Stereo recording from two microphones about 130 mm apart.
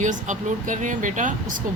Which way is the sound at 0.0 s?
75° right (ahead or behind).